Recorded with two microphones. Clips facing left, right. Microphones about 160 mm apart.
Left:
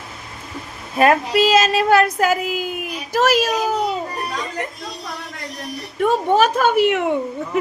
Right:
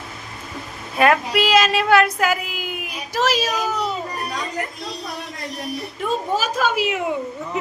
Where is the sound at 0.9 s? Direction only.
40° left (ahead or behind).